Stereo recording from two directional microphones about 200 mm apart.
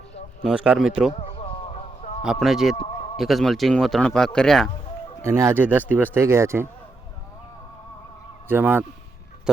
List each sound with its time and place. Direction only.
0.4 s speech: 5° right (ahead or behind)
1.1 s a sound: 30° left (ahead or behind)
2.2 s speech: centre (ahead or behind)
2.7 s a sound: 35° left (ahead or behind)
3.2 s speech: centre (ahead or behind)
5.2 s speech: 15° right (ahead or behind)
8.4 s speech: 10° right (ahead or behind)